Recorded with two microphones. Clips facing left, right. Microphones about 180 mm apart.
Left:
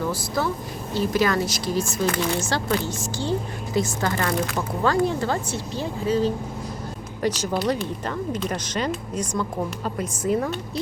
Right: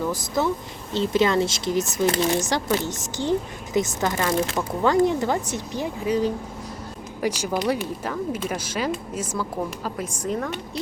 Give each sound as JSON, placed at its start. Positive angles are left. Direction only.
{"t": 0.1, "sound": "speech", "side_deg": -20}